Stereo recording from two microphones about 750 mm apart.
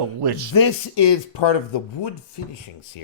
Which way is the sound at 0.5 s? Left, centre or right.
Left.